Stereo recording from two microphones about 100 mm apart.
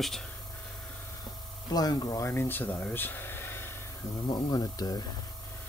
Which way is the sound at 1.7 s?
40° left (ahead or behind).